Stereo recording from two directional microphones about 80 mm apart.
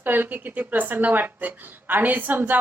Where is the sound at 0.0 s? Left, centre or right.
Right.